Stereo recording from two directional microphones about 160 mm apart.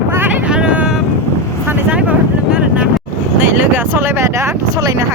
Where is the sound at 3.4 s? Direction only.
15° right (ahead or behind).